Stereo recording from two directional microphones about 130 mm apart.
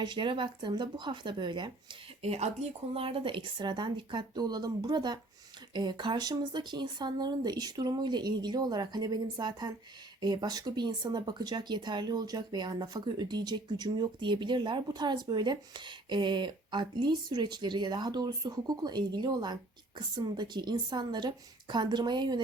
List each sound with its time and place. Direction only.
0.0 s speech: 35° right (ahead or behind)
2.2 s speech: 55° right (ahead or behind); by 22.4 s 35° right (ahead or behind)